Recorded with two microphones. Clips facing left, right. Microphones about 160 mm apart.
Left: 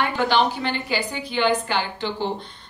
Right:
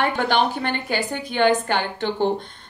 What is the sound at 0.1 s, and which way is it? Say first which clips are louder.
Speech: even; 50° right (ahead or behind).